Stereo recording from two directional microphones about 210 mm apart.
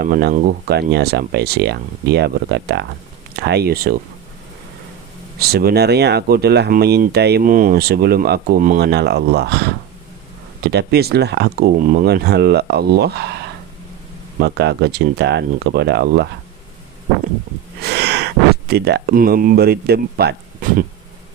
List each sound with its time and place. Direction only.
0.0 s speech: 45° right (ahead or behind)
5.4 s speech: 45° right (ahead or behind)
17.7 s a sound: 50° right (ahead or behind)
18.7 s speech: 50° right (ahead or behind)